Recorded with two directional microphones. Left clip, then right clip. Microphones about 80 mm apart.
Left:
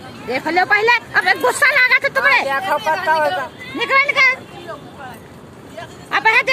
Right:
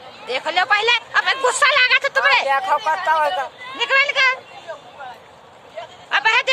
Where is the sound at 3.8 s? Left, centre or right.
Left.